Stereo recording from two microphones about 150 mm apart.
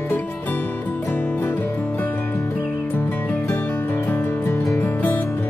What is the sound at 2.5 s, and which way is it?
Music, 10° left (ahead or behind).